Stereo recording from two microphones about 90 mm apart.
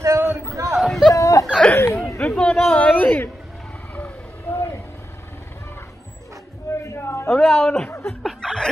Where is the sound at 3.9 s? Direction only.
15° left (ahead or behind).